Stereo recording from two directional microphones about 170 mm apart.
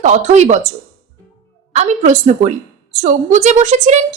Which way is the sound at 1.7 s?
45° right (ahead or behind).